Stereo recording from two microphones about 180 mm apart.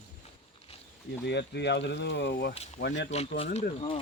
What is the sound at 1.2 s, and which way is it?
Speech, 70° left (ahead or behind).